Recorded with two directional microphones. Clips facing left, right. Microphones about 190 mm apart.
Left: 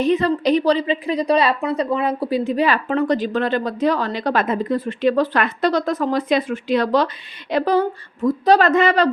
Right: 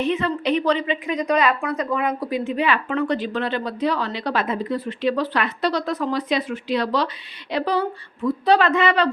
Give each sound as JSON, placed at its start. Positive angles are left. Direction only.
{"t": 0.0, "sound": "a woman's voice", "side_deg": 35}